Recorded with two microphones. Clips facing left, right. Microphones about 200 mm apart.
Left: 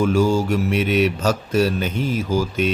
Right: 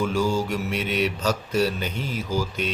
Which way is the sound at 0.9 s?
45° left (ahead or behind).